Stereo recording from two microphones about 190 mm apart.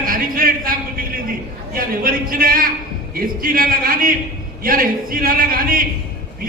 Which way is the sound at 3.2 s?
50° right (ahead or behind).